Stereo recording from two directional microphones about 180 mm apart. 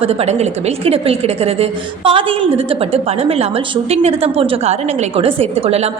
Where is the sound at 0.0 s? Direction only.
35° right (ahead or behind).